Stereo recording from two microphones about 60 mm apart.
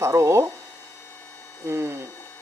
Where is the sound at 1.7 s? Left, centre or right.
Right.